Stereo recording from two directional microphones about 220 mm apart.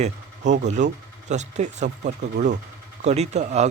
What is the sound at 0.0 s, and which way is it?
Speech, 35° right (ahead or behind).